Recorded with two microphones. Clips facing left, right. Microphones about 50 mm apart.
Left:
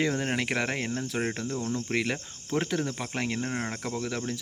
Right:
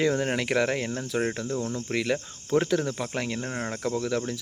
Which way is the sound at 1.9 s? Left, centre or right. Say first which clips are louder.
Right 5 dB; left.